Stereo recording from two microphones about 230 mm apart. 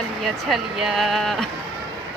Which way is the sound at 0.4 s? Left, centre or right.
Centre.